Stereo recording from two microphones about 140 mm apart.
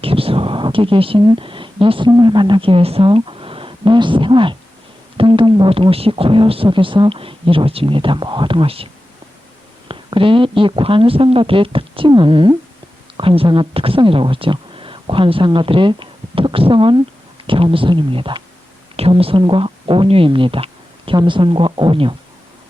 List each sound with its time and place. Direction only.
0.0 s speech: 40° right (ahead or behind)
9.9 s speech: 40° right (ahead or behind)